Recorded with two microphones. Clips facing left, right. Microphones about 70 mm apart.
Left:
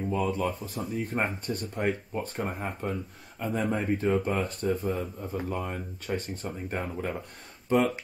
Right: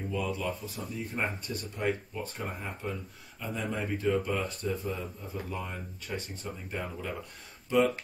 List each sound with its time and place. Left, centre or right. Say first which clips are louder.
0.1 s speech: left 4 dB; left